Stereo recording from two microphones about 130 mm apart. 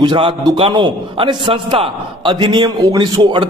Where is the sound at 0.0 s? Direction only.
40° right (ahead or behind).